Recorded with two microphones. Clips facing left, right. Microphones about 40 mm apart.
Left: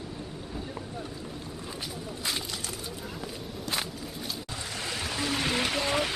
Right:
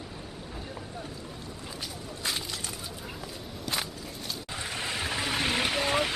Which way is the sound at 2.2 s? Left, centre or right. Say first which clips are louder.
Right 1 dB; centre.